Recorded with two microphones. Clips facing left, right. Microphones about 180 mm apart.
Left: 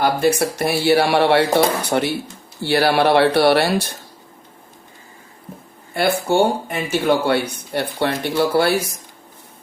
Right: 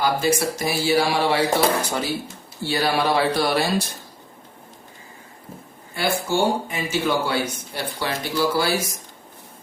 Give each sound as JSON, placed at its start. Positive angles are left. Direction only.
{"t": 0.0, "sound": "speech", "side_deg": 60}
{"t": 5.9, "sound": "speech", "side_deg": 60}